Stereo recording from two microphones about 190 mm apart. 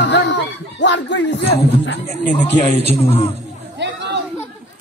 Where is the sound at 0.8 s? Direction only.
70° left (ahead or behind).